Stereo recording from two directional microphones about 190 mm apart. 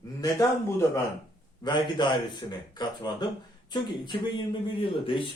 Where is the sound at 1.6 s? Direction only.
25° left (ahead or behind).